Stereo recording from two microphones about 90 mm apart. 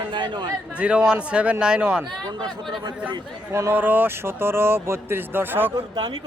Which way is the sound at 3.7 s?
20° right (ahead or behind).